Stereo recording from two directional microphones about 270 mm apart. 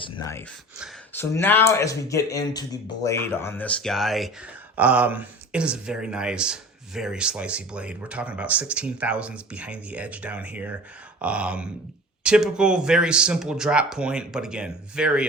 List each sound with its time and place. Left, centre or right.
0.0 s speech: centre